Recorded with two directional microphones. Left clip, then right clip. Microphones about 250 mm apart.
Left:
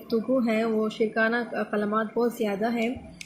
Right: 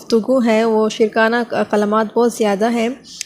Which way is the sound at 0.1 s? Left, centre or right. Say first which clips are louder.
Right 11 dB; right.